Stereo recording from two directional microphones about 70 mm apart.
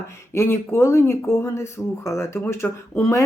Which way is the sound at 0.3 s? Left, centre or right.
Left.